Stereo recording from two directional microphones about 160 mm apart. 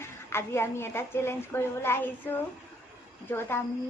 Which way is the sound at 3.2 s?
15° left (ahead or behind).